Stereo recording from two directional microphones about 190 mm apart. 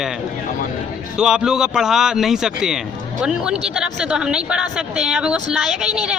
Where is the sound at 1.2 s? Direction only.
5° right (ahead or behind).